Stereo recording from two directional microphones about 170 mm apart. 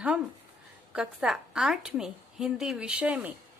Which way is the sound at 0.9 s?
5° right (ahead or behind).